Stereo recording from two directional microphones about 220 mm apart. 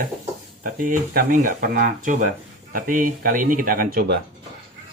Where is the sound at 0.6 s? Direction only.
40° right (ahead or behind).